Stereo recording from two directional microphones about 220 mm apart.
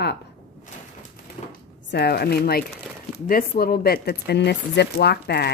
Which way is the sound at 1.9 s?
45° left (ahead or behind).